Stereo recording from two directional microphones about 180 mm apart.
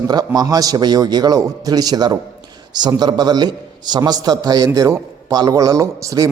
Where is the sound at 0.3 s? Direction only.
20° right (ahead or behind).